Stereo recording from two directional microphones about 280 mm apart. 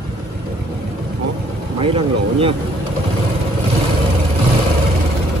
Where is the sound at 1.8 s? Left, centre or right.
Centre.